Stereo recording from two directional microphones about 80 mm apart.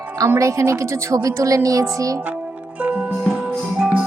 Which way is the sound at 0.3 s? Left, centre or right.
Right.